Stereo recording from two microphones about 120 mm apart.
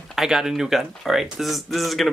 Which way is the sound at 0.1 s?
5° right (ahead or behind).